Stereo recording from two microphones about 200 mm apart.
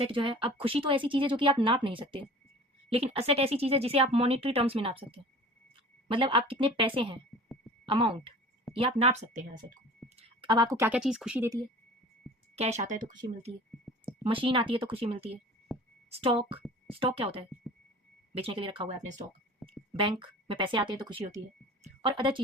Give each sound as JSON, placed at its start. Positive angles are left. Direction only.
{"t": 0.0, "sound": "speech", "side_deg": -25}
{"t": 10.2, "sound": "speech", "side_deg": -25}
{"t": 12.5, "sound": "speech", "side_deg": -35}
{"t": 13.9, "sound": "a sound", "side_deg": 0}
{"t": 14.3, "sound": "speech", "side_deg": -25}
{"t": 15.7, "sound": "a sound", "side_deg": 0}
{"t": 16.0, "sound": "a woman's voice", "side_deg": -30}
{"t": 19.6, "sound": "a sound", "side_deg": 0}
{"t": 20.0, "sound": "speech", "side_deg": -25}